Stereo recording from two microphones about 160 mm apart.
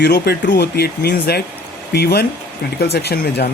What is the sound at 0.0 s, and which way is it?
Speech, 90° left.